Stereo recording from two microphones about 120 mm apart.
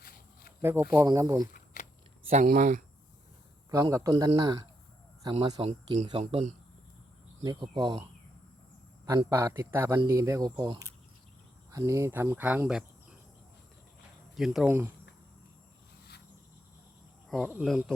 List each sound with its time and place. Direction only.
0.6 s a man's voice: 20° right (ahead or behind)
1.7 s a sound: 90° left
2.3 s speech: 90° right
3.7 s a man's voice: 30° right (ahead or behind)
6.1 s speech: 50° right (ahead or behind)
7.7 s speech: 40° right (ahead or behind)
9.0 s a man's voice: 25° right (ahead or behind); by 13.1 s 10° right (ahead or behind)
14.3 s speech: 5° right (ahead or behind)
14.7 s speech: 15° right (ahead or behind)
17.2 s cricket: 5° left (ahead or behind)
17.5 s speech: 5° right (ahead or behind)